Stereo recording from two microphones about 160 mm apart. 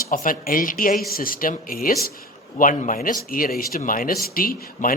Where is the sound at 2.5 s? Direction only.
50° left (ahead or behind).